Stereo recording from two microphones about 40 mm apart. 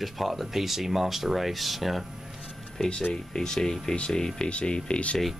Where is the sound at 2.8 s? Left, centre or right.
Centre.